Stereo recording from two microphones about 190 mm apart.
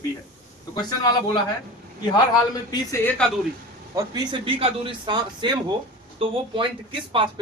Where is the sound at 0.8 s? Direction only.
20° left (ahead or behind).